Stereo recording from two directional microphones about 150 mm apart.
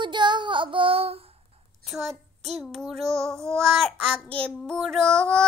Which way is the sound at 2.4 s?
Centre (ahead or behind).